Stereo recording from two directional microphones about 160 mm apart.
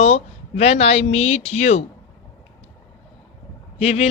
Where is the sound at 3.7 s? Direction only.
40° left (ahead or behind).